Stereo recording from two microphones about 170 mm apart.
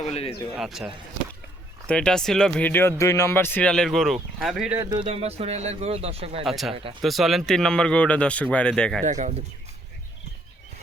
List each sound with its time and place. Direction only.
0.1 s speech: 35° left (ahead or behind)
0.5 s speech: centre (ahead or behind)
1.9 s speech: 5° left (ahead or behind)
4.8 s speech: 25° right (ahead or behind)
5.0 s speech: 35° right (ahead or behind)
6.4 s speech: centre (ahead or behind)
9.0 s speech: 45° right (ahead or behind)